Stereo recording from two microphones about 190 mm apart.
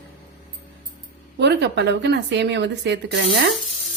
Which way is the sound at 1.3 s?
65° right (ahead or behind).